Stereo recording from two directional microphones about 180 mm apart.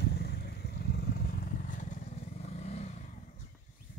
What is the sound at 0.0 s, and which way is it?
Vehicle, 60° left (ahead or behind).